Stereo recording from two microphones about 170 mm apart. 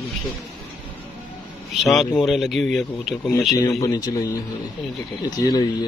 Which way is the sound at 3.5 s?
20° left (ahead or behind).